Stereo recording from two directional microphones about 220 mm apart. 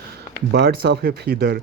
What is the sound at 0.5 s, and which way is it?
Speech, 50° right (ahead or behind).